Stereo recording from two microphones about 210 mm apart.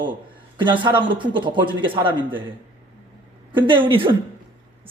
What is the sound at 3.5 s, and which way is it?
Speech, 25° right (ahead or behind).